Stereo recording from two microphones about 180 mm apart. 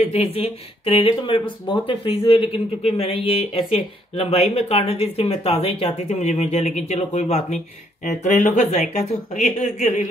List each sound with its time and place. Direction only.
0.0 s speech: 35° left (ahead or behind)